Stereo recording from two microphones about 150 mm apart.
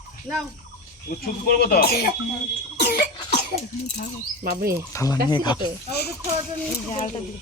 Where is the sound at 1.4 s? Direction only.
85° left.